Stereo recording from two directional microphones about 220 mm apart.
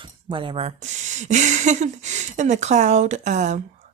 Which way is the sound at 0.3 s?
25° right (ahead or behind).